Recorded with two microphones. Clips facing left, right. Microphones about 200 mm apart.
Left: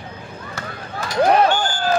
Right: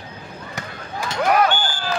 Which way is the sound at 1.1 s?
30° left (ahead or behind).